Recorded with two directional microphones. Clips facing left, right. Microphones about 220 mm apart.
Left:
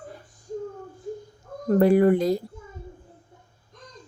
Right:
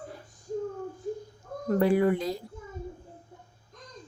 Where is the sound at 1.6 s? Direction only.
45° left (ahead or behind).